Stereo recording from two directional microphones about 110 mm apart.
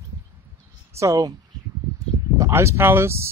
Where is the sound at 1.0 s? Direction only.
30° right (ahead or behind).